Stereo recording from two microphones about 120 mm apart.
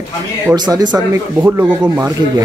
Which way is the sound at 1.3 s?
20° right (ahead or behind).